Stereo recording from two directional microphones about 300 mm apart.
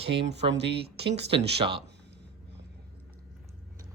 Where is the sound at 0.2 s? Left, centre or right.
Right.